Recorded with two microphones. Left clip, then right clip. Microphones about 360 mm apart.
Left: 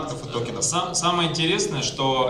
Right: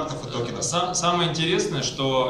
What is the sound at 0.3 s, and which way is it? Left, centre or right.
A man's voice, centre.